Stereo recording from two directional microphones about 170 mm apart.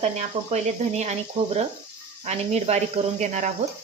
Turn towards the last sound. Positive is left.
turn(degrees=-45)  # may be behind; listen again after turning